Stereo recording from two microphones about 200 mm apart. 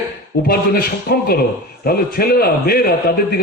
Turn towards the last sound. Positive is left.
turn(degrees=50)  # may be behind; listen again after turning